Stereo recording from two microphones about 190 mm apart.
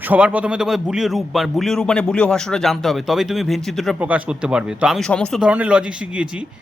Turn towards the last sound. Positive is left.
turn(degrees=-5)  # may be behind; listen again after turning